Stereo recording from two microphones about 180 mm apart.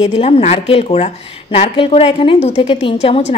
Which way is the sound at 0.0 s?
35° left (ahead or behind).